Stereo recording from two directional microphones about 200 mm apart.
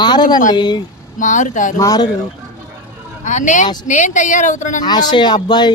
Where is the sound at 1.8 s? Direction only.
15° left (ahead or behind).